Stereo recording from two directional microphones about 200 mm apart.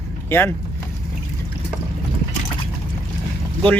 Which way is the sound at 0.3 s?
10° left (ahead or behind).